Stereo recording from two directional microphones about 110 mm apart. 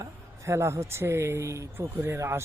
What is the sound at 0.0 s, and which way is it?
Speech, 25° right (ahead or behind).